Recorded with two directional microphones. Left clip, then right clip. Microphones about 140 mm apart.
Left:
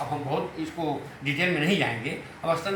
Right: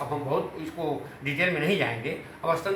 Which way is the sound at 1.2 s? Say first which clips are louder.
Even; 10° right (ahead or behind).